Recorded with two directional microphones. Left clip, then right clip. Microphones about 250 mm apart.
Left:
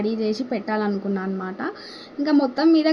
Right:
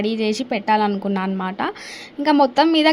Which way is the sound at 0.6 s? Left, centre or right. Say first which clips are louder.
Right 9 dB; right.